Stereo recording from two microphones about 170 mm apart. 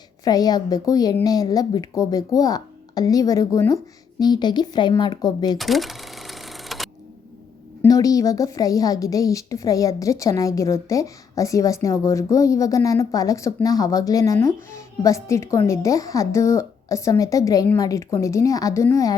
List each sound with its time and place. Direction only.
0.3 s a woman's voice: 20° left (ahead or behind)
5.5 s cash register: centre (ahead or behind)
7.9 s a woman's voice: 20° left (ahead or behind)